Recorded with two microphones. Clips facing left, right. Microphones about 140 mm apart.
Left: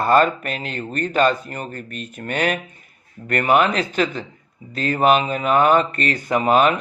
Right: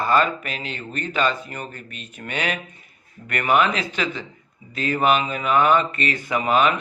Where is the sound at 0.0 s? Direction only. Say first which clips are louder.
Left 4 dB; 50° left (ahead or behind).